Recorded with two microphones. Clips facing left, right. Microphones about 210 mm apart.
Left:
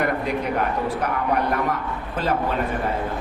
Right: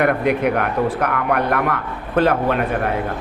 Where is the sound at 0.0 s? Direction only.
65° right (ahead or behind).